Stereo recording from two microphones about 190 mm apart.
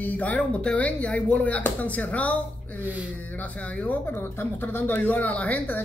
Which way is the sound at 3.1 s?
10° left (ahead or behind).